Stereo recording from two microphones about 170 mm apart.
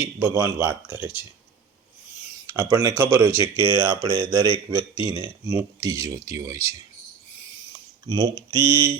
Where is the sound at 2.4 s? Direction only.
15° right (ahead or behind).